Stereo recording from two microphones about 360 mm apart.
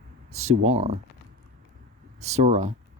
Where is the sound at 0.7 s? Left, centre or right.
Centre.